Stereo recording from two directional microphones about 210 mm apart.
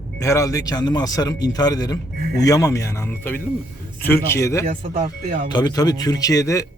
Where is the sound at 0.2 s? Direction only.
15° left (ahead or behind).